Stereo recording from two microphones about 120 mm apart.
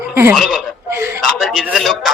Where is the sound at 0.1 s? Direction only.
20° right (ahead or behind).